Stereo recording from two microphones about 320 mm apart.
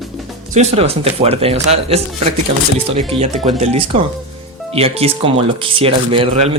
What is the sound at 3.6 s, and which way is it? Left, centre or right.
Speech, centre.